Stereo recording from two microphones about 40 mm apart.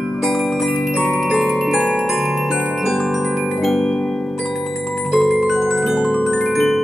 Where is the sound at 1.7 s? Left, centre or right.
Centre.